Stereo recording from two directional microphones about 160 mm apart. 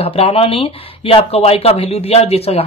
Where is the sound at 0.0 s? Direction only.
40° left (ahead or behind).